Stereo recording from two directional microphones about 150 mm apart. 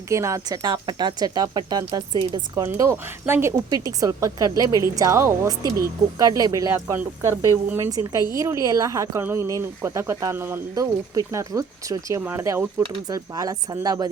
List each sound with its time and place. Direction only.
0.1 s speech: 20° right (ahead or behind)